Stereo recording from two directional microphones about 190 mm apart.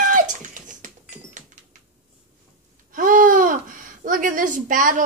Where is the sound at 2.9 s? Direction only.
45° right (ahead or behind).